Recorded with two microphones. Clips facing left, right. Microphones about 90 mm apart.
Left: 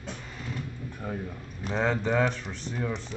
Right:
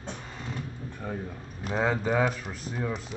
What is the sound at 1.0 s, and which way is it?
Speech, 5° right (ahead or behind).